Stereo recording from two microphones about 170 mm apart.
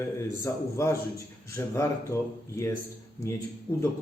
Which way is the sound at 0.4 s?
15° left (ahead or behind).